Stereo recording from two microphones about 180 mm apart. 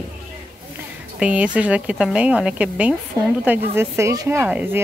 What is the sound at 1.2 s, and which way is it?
Speech, 5° right (ahead or behind).